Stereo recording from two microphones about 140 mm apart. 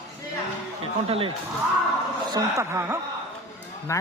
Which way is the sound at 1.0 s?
40° right (ahead or behind).